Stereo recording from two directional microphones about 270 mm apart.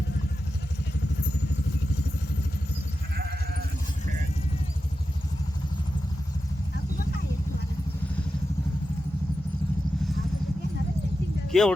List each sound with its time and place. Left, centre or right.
3.2 s goat: right
11.5 s speech: centre